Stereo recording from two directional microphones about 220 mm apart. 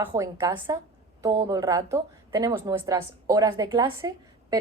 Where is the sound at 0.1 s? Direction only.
15° right (ahead or behind).